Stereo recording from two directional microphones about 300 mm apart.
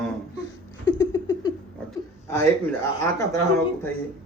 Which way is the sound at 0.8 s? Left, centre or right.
Centre.